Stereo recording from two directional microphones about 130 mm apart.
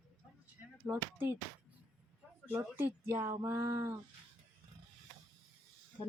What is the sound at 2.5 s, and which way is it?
Speech, 15° right (ahead or behind).